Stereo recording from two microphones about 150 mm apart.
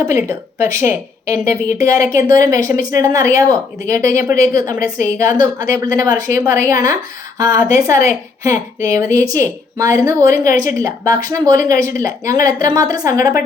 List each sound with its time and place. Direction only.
0.0 s speech: 20° right (ahead or behind)